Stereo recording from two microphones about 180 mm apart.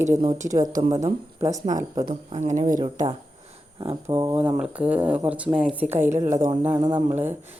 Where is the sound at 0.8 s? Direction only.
20° right (ahead or behind).